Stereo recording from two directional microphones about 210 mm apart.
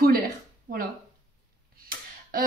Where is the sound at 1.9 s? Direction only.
45° right (ahead or behind).